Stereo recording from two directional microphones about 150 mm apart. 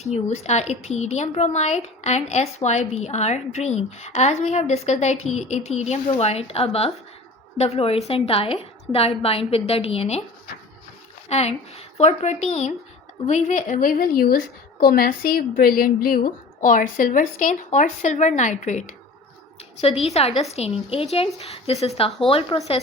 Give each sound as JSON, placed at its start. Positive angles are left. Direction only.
{"t": 0.0, "sound": "a woman's voice", "side_deg": 45}
{"t": 11.3, "sound": "a woman's voice", "side_deg": 45}
{"t": 19.8, "sound": "a woman's voice", "side_deg": 45}